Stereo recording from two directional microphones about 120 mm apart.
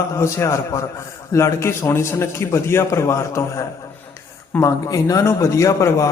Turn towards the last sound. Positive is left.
turn(degrees=25)  # may be behind; listen again after turning